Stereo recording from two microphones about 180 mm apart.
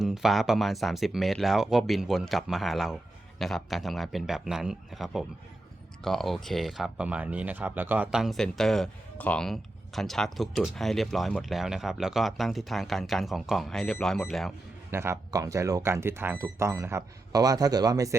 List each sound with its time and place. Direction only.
0.0 s speech: centre (ahead or behind)
14.8 s speech: 15° right (ahead or behind)